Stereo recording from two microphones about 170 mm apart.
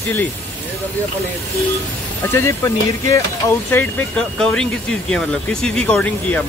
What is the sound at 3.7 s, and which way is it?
Speech, 10° left (ahead or behind).